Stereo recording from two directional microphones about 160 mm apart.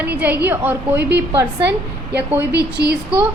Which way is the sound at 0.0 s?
10° right (ahead or behind).